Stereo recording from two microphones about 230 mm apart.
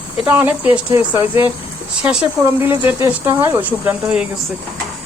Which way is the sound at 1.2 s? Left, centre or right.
Left.